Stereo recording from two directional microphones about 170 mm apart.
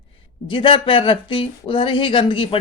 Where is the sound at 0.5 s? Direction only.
30° left (ahead or behind).